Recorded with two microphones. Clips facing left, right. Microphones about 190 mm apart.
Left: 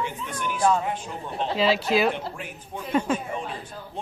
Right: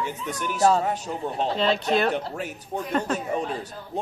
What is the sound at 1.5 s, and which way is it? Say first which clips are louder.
Speech: left 2 dB; 5° left (ahead or behind).